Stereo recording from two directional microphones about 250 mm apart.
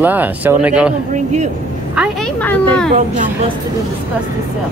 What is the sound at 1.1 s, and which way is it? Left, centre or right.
Speech, right.